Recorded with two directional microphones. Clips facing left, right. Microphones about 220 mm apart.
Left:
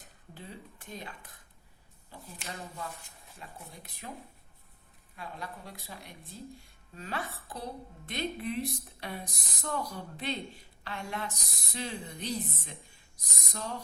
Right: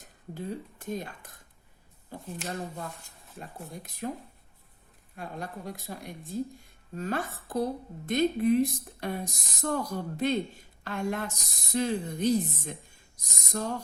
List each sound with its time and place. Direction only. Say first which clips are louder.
0.3 s a woman's voice: right 10 dB; 45° right (ahead or behind)
4.0 s a woman's voice: right 10 dB; 50° right (ahead or behind)